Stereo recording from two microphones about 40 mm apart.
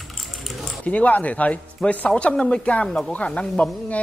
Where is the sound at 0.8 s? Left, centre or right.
Left.